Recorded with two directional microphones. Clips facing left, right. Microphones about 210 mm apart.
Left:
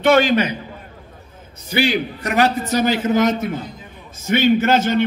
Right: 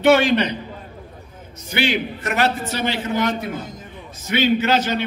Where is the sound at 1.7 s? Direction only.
35° left (ahead or behind).